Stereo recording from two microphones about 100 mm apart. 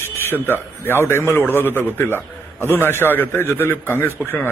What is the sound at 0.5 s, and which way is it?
A man's voice, 20° left (ahead or behind).